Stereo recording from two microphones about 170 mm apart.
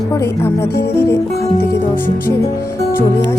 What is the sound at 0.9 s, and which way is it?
Speech, 15° left (ahead or behind).